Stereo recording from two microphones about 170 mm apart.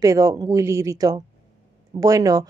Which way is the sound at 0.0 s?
20° right (ahead or behind).